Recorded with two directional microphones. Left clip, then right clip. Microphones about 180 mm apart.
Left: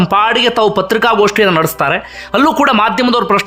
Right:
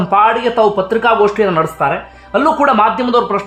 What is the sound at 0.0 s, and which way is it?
Speech, 25° left (ahead or behind).